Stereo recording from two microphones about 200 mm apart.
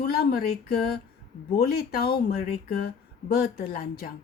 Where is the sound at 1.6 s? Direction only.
50° left (ahead or behind).